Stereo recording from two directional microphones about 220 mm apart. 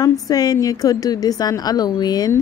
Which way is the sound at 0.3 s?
15° left (ahead or behind).